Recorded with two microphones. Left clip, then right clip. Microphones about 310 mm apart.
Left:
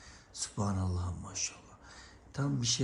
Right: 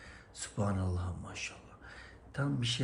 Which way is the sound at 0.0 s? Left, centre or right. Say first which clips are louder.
Left 3 dB; centre.